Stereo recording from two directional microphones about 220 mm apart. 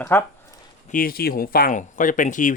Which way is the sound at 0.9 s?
40° left (ahead or behind).